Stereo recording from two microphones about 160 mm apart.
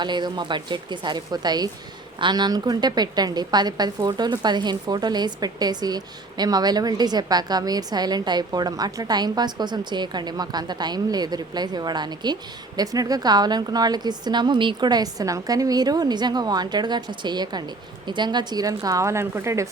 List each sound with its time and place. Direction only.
0.0 s a woman's voice: 30° right (ahead or behind)